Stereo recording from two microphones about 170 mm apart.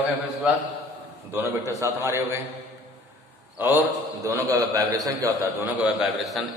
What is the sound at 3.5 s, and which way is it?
A man's voice, 10° right (ahead or behind).